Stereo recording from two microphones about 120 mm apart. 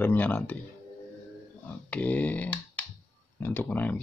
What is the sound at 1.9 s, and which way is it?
Speech, 10° left (ahead or behind).